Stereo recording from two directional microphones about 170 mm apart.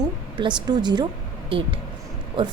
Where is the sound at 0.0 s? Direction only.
25° right (ahead or behind).